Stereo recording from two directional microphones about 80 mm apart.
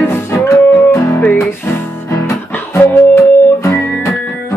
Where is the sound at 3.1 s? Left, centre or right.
Left.